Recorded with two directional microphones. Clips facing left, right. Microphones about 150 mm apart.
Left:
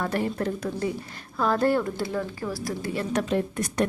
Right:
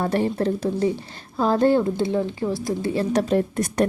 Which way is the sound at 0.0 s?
30° right (ahead or behind).